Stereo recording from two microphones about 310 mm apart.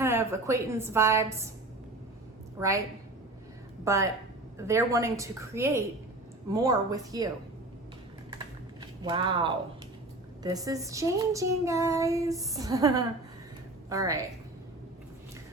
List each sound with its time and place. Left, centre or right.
0.0 s a woman's voice: centre
2.6 s child singing: centre
3.8 s child singing: centre
8.8 s speech: centre
10.4 s child singing: centre